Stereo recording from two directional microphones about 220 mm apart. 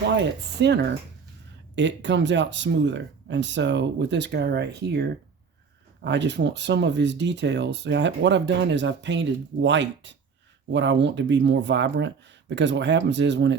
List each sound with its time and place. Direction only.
0.3 s speech: 50° right (ahead or behind)